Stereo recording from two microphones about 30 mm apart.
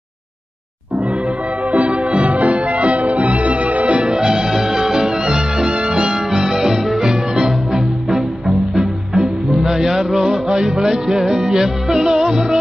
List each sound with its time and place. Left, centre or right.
1.7 s music: right
4.2 s music: right
9.1 s music: right
9.6 s music: centre